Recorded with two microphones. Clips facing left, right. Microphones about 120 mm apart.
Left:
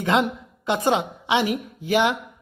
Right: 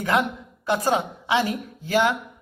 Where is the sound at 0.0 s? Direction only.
20° left (ahead or behind).